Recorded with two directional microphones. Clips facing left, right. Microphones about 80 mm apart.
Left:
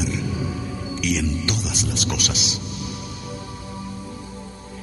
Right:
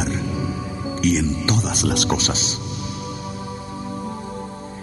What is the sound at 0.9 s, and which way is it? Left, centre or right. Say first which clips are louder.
Music: right 4 dB; right.